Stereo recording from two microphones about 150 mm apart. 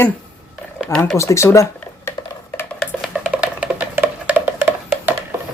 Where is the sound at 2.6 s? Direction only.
5° left (ahead or behind).